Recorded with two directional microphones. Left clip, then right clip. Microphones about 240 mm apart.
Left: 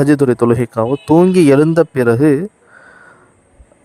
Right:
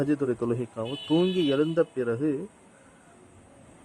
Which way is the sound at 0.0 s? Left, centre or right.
Left.